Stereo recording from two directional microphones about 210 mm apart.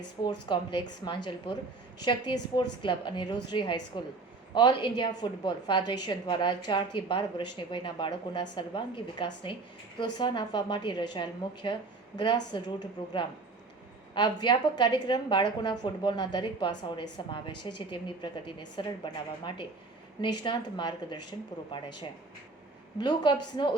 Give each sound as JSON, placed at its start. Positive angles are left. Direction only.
{"t": 0.4, "sound": "a woman's voice", "side_deg": 20}
{"t": 14.4, "sound": "a woman's voice", "side_deg": 20}
{"t": 23.0, "sound": "a woman's voice", "side_deg": 20}